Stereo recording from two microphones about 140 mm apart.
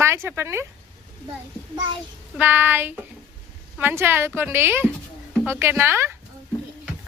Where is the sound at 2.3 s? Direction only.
15° right (ahead or behind).